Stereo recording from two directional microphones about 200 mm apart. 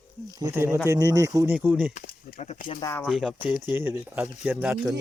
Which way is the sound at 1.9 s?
40° left (ahead or behind).